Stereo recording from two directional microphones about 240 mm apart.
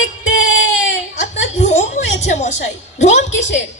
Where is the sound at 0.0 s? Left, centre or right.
Left.